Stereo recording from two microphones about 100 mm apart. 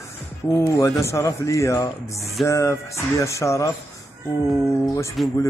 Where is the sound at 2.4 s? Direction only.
30° left (ahead or behind).